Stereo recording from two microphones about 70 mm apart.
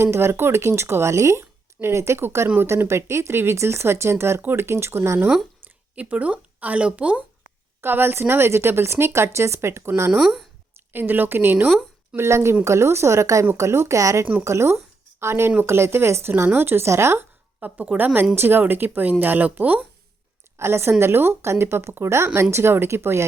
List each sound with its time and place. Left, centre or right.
0.0 s speech: right
6.0 s speech: right
7.8 s speech: right
10.2 s speech: centre
10.9 s a woman's voice: right
17.6 s speech: right
20.6 s speech: right